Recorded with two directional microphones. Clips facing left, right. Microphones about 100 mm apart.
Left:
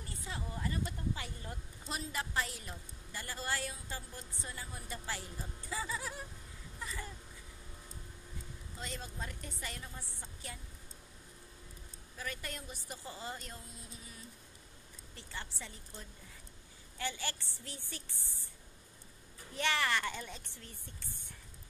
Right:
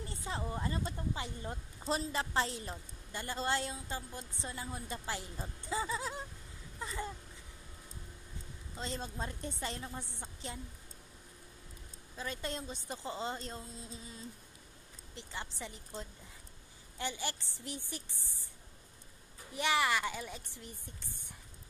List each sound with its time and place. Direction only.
0.0 s speech: 25° right (ahead or behind)
6.8 s a sound: 25° right (ahead or behind)
8.7 s speech: 30° right (ahead or behind)
12.2 s speech: 25° right (ahead or behind)
19.5 s speech: 15° right (ahead or behind)